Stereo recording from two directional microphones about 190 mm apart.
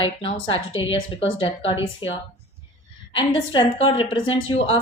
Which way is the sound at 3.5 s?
25° left (ahead or behind).